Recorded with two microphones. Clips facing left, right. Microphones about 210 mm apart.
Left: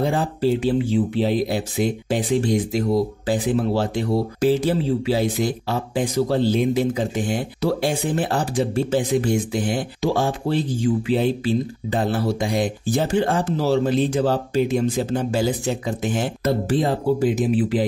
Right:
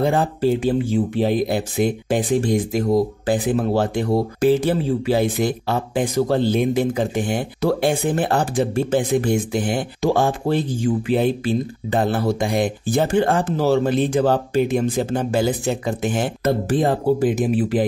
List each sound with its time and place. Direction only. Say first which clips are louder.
0.0 s speech: right 2 dB; 55° right (ahead or behind)